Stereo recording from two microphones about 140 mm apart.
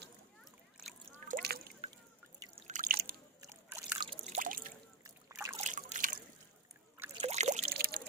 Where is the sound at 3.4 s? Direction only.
20° right (ahead or behind).